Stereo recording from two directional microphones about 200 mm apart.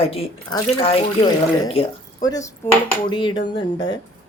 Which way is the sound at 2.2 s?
15° left (ahead or behind).